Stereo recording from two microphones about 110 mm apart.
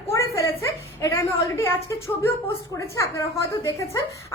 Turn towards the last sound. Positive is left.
turn(degrees=25)  # may be behind; listen again after turning